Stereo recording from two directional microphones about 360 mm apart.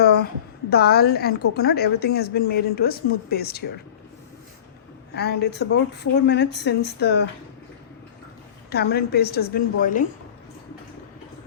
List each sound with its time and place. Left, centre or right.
0.0 s a sound: left
0.7 s a woman's voice: left
5.1 s a woman's voice: left
8.7 s a woman's voice: left